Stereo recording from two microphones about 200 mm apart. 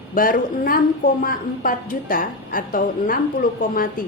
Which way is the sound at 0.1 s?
45° left (ahead or behind).